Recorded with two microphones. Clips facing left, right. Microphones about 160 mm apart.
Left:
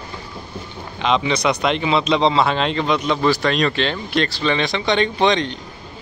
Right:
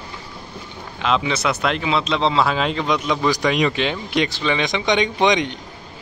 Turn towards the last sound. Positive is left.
turn(degrees=-15)  # may be behind; listen again after turning